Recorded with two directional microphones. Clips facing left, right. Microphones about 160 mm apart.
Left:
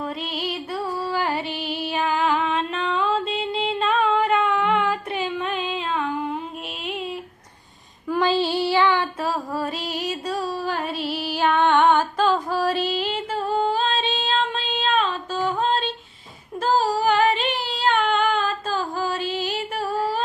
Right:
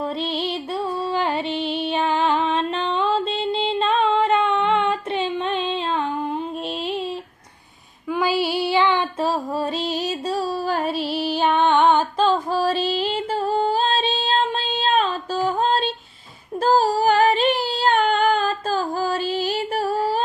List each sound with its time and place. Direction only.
0.0 s music: 30° right (ahead or behind)
6.8 s a sound: 30° right (ahead or behind)
8.0 s female singing: 5° right (ahead or behind); by 10.9 s 40° right (ahead or behind)
11.1 s music: 25° right (ahead or behind)
12.9 s female singing: 30° right (ahead or behind)
16.6 s a sound: 35° right (ahead or behind)